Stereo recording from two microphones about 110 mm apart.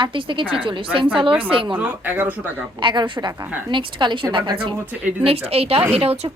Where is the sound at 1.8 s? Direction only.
15° right (ahead or behind).